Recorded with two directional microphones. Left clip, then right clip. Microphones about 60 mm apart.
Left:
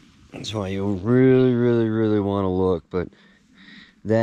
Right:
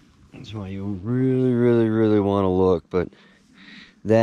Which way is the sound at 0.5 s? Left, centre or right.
Right.